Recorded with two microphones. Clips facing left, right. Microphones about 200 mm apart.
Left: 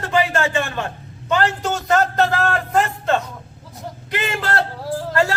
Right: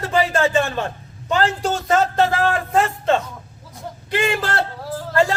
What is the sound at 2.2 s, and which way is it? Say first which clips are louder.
Speech: right 1 dB; 10° right (ahead or behind).